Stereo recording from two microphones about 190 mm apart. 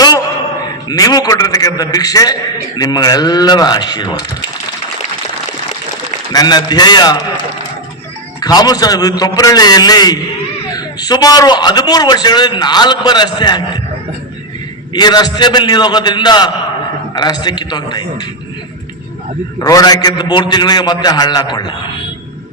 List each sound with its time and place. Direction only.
0.9 s a man's voice: 20° left (ahead or behind)
6.3 s a man's voice: 20° left (ahead or behind)
8.4 s a man's voice: 20° left (ahead or behind)
14.9 s a man's voice: 20° left (ahead or behind)
19.5 s a man's voice: 20° left (ahead or behind)